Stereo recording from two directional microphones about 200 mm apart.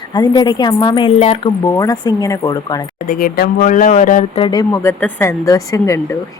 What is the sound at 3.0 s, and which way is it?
Speech, 45° left (ahead or behind).